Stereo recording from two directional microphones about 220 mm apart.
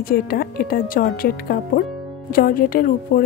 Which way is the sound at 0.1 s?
40° left (ahead or behind).